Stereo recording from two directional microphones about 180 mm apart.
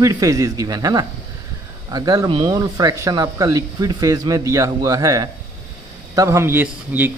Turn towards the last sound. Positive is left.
turn(degrees=-10)  # may be behind; listen again after turning